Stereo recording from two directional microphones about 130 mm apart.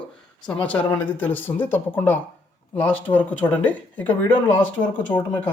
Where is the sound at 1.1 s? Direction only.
15° left (ahead or behind).